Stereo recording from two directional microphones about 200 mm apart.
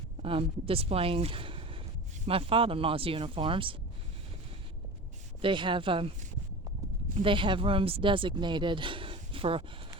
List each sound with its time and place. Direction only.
0.2 s speech: 25° right (ahead or behind)
5.4 s speech: 25° right (ahead or behind)